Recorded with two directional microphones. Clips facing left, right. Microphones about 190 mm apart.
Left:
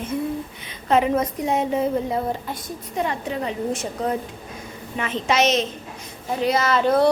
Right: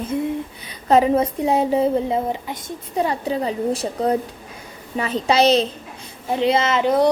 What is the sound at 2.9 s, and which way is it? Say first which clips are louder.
A woman's voice: right 4 dB; 35° right (ahead or behind).